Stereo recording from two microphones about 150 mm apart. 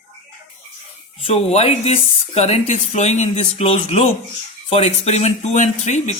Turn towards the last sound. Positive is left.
turn(degrees=50)  # may be behind; listen again after turning